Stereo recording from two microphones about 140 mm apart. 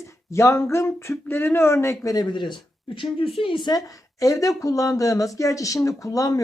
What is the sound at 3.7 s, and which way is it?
Speech, 25° left (ahead or behind).